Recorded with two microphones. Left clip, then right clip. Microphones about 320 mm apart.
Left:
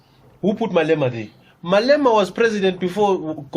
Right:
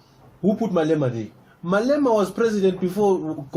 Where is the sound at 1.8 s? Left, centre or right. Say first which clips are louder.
Left 4 dB; left.